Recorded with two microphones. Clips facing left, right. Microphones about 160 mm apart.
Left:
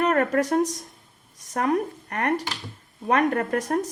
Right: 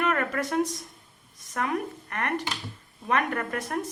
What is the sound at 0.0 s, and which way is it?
A woman's voice, 40° left (ahead or behind).